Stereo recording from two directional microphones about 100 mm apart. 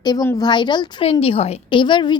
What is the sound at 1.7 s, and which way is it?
Speech, 55° left (ahead or behind).